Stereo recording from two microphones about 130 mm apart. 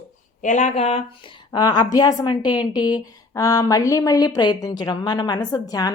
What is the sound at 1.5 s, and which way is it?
A woman's voice, 30° left (ahead or behind).